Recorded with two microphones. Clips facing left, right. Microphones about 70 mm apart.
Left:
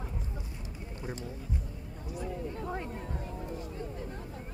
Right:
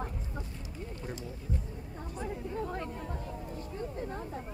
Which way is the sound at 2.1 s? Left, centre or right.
Right.